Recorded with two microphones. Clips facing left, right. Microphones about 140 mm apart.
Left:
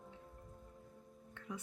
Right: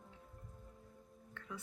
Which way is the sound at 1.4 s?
20° left (ahead or behind).